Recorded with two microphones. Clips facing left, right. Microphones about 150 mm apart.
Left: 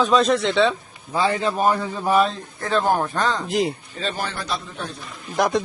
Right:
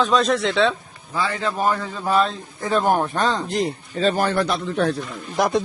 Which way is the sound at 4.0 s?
45° right (ahead or behind).